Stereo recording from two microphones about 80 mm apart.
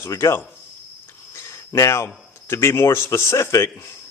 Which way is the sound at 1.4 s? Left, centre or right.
Left.